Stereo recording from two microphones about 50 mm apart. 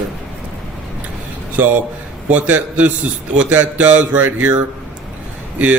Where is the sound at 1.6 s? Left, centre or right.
Right.